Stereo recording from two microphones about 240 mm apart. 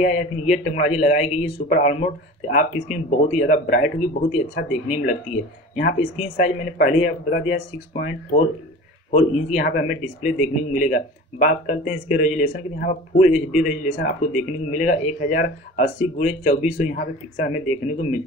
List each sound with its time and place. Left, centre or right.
0.0 s speech: left